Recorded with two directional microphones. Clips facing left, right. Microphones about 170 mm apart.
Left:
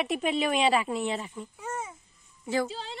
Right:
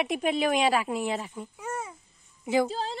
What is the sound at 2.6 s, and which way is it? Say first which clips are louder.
Speech: right 5 dB; 40° right (ahead or behind).